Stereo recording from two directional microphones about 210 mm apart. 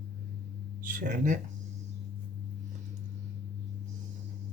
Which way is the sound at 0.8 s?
40° right (ahead or behind).